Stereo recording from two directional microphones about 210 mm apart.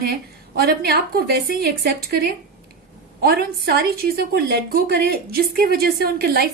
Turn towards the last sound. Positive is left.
turn(degrees=-50)  # may be behind; listen again after turning